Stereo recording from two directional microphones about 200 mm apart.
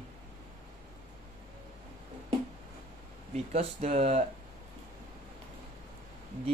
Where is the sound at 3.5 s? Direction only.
30° right (ahead or behind).